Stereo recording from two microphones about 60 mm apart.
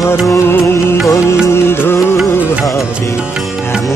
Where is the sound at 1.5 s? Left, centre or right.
Left.